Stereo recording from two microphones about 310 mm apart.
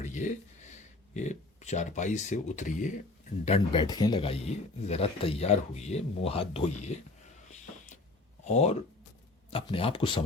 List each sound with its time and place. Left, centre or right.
0.0 s speech: left
8.4 s speech: left